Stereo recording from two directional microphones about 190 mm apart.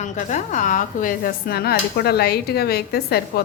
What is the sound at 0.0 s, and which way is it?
Speech, 40° left (ahead or behind).